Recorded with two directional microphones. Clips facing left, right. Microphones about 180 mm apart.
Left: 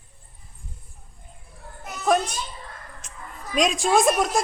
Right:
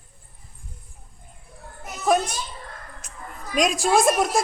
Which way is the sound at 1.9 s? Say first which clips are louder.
Right 1 dB; 5° right (ahead or behind).